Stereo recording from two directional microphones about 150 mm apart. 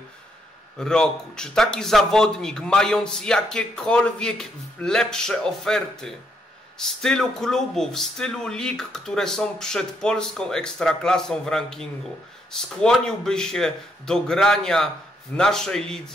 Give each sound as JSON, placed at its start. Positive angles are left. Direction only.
{"t": 0.7, "sound": "a man's voice", "side_deg": 5}